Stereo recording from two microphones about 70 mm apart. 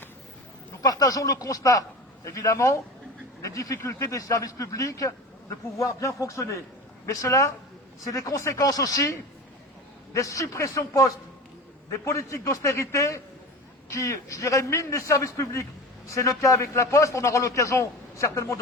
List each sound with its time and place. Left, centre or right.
0.8 s a man's voice: left